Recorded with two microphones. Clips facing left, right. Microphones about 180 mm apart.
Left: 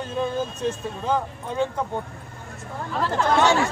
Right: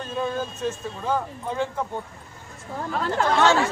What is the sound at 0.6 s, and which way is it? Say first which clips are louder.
Speech: left 2 dB; 20° left (ahead or behind).